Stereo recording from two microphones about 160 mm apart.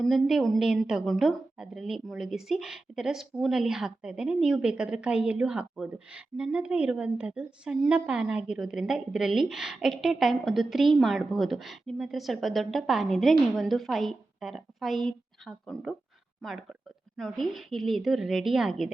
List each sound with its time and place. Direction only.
0.0 s a woman's voice: centre (ahead or behind)
17.2 s a woman's voice: centre (ahead or behind)